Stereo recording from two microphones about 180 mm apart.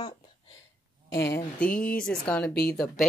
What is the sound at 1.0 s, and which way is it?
Speech, 70° left (ahead or behind).